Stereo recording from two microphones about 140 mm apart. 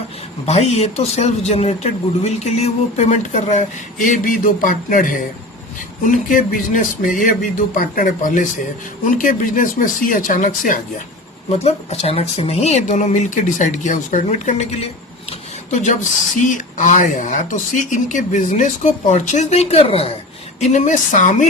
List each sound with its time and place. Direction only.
0.4 s speech: 50° left (ahead or behind); by 10.8 s 75° left (ahead or behind)
11.5 s speech: 45° left (ahead or behind)
15.3 s a sound: 60° left (ahead or behind)
16.4 s speech: 65° left (ahead or behind); by 20.1 s 45° left (ahead or behind)
20.6 s speech: 60° left (ahead or behind)